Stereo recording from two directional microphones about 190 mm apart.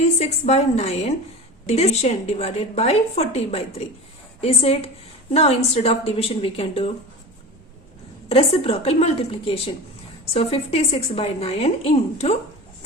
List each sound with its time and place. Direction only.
0.2 s a woman's voice: 35° left (ahead or behind)
8.3 s a woman's voice: 30° left (ahead or behind)